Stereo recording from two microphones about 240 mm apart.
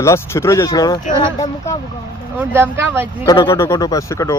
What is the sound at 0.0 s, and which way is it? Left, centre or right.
Speech, centre.